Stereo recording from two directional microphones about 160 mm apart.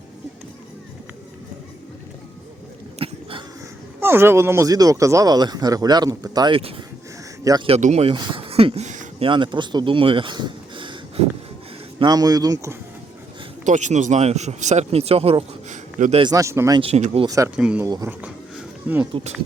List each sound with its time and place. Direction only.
3.0 s a sound: 35° right (ahead or behind)
4.0 s speech: 15° right (ahead or behind)
7.8 s speech: 45° right (ahead or behind)
9.2 s speech: 30° right (ahead or behind)
13.7 s speech: 50° right (ahead or behind)
16.2 s speech: 20° right (ahead or behind)
16.8 s speech: 40° right (ahead or behind)
17.2 s speech: 20° right (ahead or behind)
17.6 s speech: 5° right (ahead or behind)
17.8 s speech: 25° right (ahead or behind)
18.2 s a sound: 10° right (ahead or behind)